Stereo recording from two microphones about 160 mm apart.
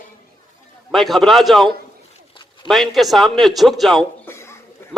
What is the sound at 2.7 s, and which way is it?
Speech, centre (ahead or behind).